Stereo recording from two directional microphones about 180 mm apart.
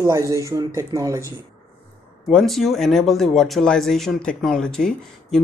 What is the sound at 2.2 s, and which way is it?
Speech, centre (ahead or behind).